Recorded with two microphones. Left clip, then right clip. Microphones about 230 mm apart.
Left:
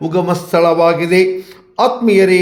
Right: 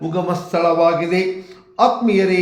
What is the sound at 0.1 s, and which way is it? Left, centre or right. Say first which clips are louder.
Speech: left 6 dB; left.